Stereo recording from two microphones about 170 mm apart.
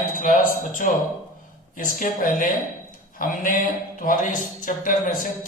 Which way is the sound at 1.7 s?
50° left (ahead or behind).